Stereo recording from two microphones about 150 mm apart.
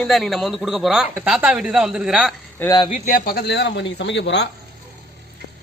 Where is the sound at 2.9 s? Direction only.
60° left (ahead or behind); by 3.5 s 85° left.